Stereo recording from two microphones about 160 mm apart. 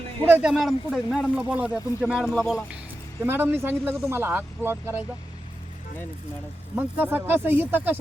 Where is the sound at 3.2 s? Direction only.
15° right (ahead or behind).